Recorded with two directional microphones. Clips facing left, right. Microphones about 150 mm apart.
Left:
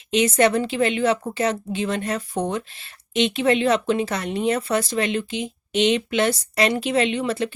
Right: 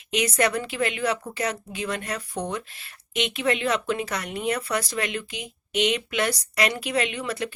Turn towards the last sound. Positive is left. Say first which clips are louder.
# left 6 dB
turn(degrees=25)  # may be behind; listen again after turning